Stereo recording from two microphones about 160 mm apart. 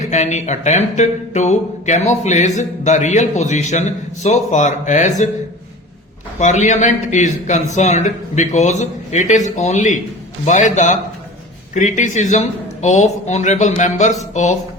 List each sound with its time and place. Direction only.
0.0 s speech: 45° left (ahead or behind)
6.4 s speech: 50° left (ahead or behind)